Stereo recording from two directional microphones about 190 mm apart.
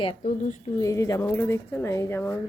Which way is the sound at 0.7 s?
15° left (ahead or behind).